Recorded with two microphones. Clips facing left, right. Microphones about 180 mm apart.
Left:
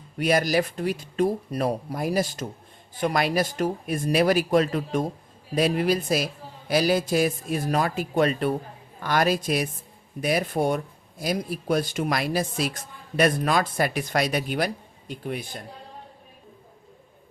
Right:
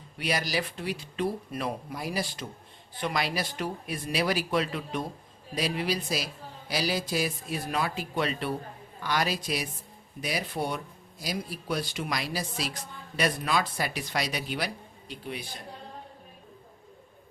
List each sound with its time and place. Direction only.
0.2 s a woman's voice: 50° left (ahead or behind)